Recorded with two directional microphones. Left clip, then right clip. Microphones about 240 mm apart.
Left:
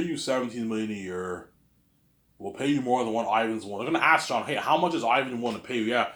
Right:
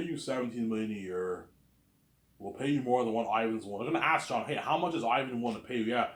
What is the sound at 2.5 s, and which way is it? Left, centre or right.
Speech, left.